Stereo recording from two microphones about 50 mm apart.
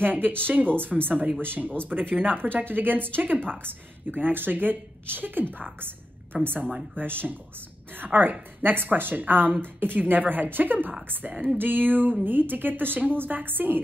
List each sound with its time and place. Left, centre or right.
0.0 s a woman's voice: right
11.5 s a woman's voice: right